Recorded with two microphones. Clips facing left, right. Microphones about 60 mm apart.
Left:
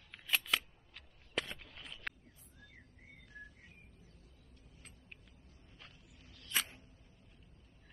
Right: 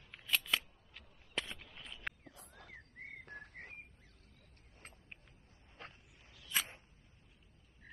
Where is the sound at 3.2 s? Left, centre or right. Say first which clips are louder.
Right 4 dB; right.